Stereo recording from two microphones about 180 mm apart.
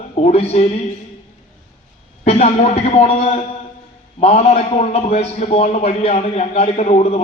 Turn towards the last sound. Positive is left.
turn(degrees=35)  # may be behind; listen again after turning